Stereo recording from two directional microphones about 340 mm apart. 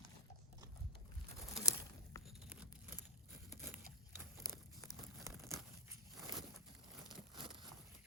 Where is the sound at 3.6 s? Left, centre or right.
Right.